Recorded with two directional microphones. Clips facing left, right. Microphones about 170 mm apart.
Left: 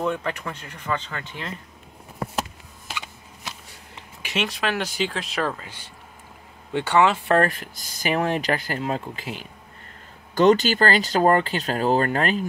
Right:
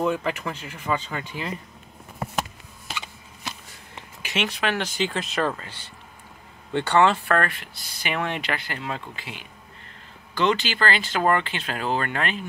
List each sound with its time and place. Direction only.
0.0 s speech: 5° right (ahead or behind)
2.9 s a sound: 10° left (ahead or behind)
4.3 s speech: centre (ahead or behind)
7.2 s speech: 35° left (ahead or behind)